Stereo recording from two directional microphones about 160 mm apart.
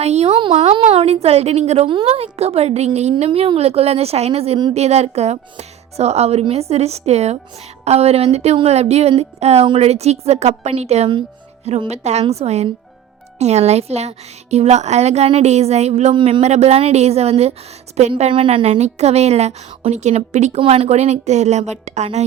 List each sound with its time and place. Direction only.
0.0 s a woman's voice: 40° right (ahead or behind)